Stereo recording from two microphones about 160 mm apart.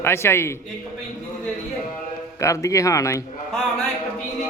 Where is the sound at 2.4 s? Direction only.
20° left (ahead or behind).